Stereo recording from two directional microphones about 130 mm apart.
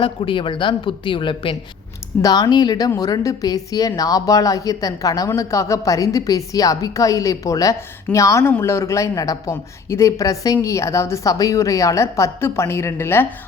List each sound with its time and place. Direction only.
0.0 s a woman's voice: 40° left (ahead or behind); by 13.2 s 20° left (ahead or behind)